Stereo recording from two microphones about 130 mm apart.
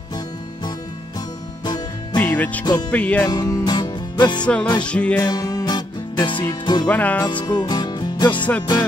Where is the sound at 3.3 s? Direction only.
30° left (ahead or behind).